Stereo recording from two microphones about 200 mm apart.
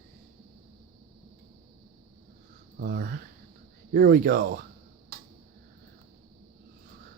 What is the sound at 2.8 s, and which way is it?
Speech, 50° right (ahead or behind).